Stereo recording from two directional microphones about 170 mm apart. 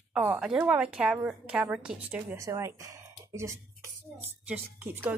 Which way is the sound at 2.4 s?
20° right (ahead or behind).